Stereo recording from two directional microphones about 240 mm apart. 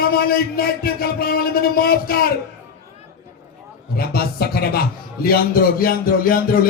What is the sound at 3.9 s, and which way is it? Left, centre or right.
A man's voice, left.